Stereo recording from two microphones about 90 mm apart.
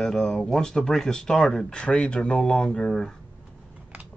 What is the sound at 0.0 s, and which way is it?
Speech, 5° left (ahead or behind).